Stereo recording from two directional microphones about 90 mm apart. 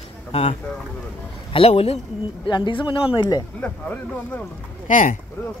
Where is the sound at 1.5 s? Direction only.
90° left.